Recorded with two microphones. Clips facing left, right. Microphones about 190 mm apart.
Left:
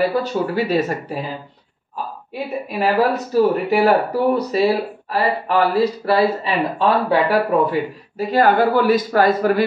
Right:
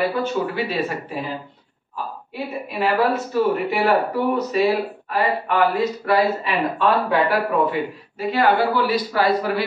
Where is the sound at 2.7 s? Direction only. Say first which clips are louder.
Left 2 dB; 40° left (ahead or behind).